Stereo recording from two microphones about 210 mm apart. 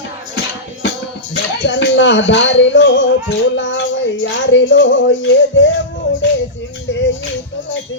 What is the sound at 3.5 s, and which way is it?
Music, 60° left (ahead or behind).